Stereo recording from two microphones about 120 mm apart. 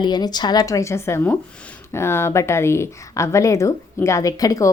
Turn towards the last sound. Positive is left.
turn(degrees=30)  # may be behind; listen again after turning